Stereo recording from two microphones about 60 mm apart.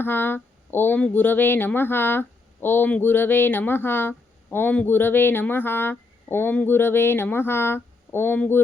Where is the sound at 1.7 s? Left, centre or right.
Left.